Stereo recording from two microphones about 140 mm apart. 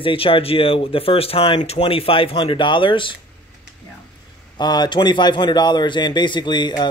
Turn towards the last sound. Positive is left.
turn(degrees=30)  # may be behind; listen again after turning